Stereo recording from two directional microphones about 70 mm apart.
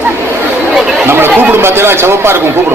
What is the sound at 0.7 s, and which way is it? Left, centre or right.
Chatter, centre.